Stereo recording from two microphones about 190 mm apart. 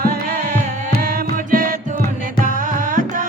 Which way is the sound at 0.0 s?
50° right (ahead or behind).